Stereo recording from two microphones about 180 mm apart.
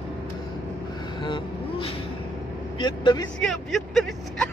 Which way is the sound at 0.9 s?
25° left (ahead or behind).